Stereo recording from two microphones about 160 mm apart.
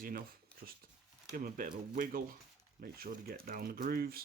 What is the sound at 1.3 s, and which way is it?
Speech, 55° right (ahead or behind).